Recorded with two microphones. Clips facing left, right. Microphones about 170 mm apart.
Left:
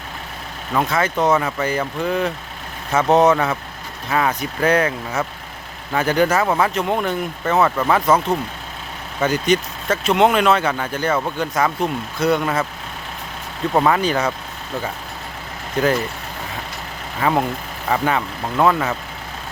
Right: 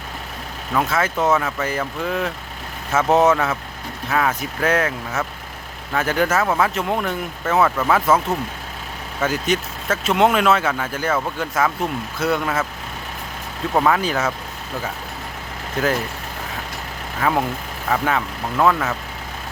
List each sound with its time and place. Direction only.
0.7 s speech: centre (ahead or behind)
13.7 s speech: centre (ahead or behind)
15.8 s speech: centre (ahead or behind)
17.2 s speech: centre (ahead or behind)